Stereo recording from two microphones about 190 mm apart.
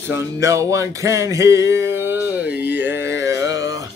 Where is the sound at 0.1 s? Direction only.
15° right (ahead or behind).